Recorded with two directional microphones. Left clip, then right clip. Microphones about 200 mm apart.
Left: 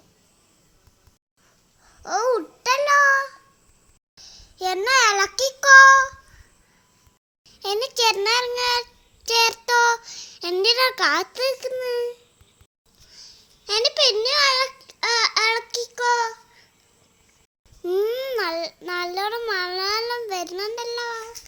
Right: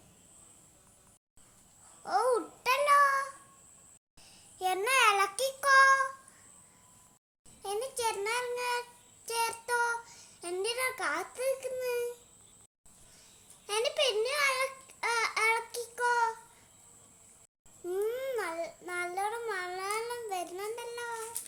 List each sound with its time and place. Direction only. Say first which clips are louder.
2.0 s babbling: left 7 dB; 20° left (ahead or behind)
4.3 s child singing: left 7 dB; 20° left (ahead or behind)
7.6 s child singing: left 12 dB; 40° left (ahead or behind)
13.7 s babbling: left 10 dB; 30° left (ahead or behind)
17.8 s a child's voice: left 10 dB; 40° left (ahead or behind)